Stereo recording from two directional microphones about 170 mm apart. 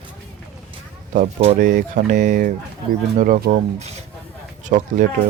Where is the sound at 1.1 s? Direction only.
40° right (ahead or behind).